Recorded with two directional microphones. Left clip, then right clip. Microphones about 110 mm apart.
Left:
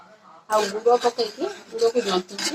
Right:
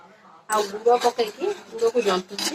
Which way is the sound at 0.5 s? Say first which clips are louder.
Left 1 dB; 30° left (ahead or behind).